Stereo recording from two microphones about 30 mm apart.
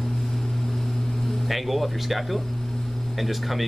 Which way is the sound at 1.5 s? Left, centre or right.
Centre.